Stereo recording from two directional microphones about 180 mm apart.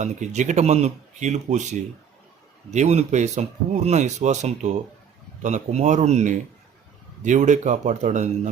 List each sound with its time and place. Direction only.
0.0 s speech: 40° right (ahead or behind)